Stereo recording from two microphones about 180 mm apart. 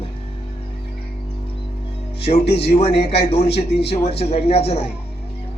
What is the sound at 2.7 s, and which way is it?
A man's voice, 35° left (ahead or behind).